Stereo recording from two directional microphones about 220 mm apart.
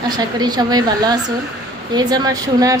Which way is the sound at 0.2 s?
20° right (ahead or behind).